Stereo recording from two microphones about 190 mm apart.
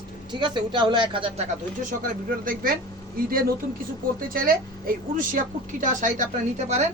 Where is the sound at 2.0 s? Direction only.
50° right (ahead or behind).